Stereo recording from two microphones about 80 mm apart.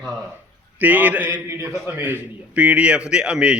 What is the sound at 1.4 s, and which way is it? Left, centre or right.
A man's voice, right.